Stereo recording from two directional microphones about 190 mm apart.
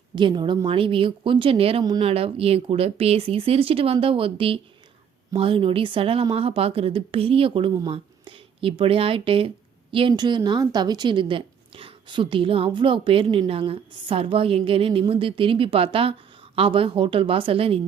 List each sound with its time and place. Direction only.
0.2 s a woman's voice: 25° right (ahead or behind)